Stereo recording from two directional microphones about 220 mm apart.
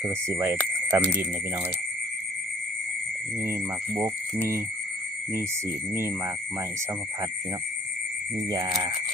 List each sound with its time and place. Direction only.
0.0 s speech: 10° right (ahead or behind)
3.4 s speech: 10° right (ahead or behind)